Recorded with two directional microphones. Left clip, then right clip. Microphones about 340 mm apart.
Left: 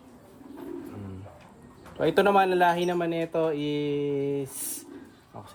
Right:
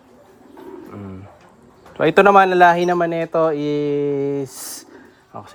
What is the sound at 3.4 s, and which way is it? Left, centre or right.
Mantra, right.